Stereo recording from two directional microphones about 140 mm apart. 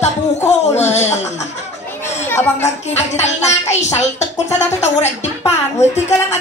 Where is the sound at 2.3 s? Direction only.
20° left (ahead or behind).